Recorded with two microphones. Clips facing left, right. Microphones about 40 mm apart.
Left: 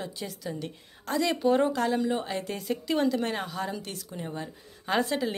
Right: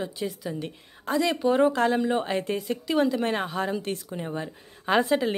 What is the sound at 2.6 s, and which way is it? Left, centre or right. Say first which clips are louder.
A woman's voice: even; centre.